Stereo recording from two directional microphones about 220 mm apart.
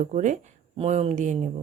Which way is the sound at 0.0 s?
35° right (ahead or behind).